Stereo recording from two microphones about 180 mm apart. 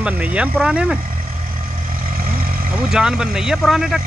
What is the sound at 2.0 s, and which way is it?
Vehicle, 55° right (ahead or behind).